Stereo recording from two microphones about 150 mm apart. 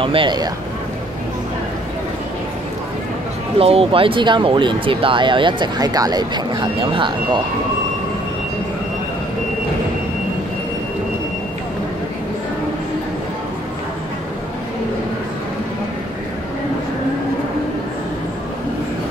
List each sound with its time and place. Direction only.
0.0 s speech: 35° right (ahead or behind)
3.5 s speech: 40° right (ahead or behind)